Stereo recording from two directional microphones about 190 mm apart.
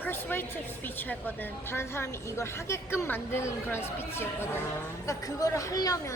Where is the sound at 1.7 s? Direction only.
15° left (ahead or behind).